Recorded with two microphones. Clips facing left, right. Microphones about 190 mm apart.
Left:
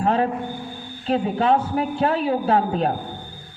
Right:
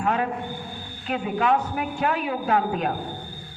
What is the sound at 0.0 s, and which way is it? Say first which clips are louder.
A man's voice: left 4 dB; 30° left (ahead or behind).